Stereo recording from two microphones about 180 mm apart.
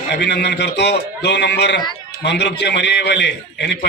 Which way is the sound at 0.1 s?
65° left (ahead or behind).